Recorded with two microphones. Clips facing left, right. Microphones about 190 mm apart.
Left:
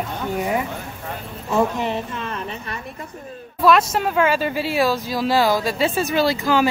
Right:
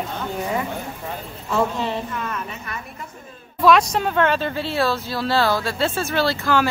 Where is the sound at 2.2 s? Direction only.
30° left (ahead or behind).